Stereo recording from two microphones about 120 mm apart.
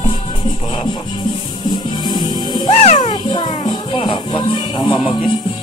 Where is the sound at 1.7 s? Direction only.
35° left (ahead or behind).